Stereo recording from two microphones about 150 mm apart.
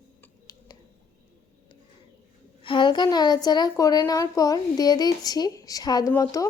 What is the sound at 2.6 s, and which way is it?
A woman's voice, 30° left (ahead or behind).